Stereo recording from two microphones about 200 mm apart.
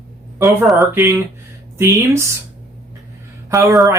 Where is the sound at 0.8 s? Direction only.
10° right (ahead or behind).